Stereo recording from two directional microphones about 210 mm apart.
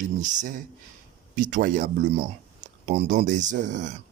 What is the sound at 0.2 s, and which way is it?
A man's voice, 35° right (ahead or behind).